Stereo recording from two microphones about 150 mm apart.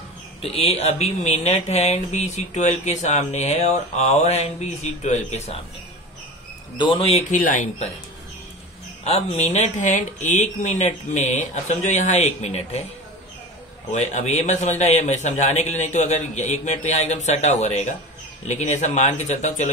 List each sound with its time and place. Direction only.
0.4 s speech: 40° left (ahead or behind)
6.8 s speech: 35° left (ahead or behind); by 7.9 s 55° left (ahead or behind)
9.0 s speech: 45° left (ahead or behind)
13.9 s speech: 50° left (ahead or behind)